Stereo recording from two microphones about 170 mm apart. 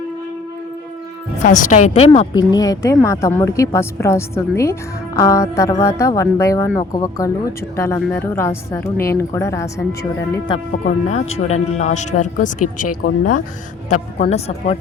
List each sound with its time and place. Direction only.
1.4 s speech: 45° left (ahead or behind)
2.3 s a woman's voice: 25° left (ahead or behind)
10.8 s speech: 40° left (ahead or behind)
13.9 s speech: 40° left (ahead or behind)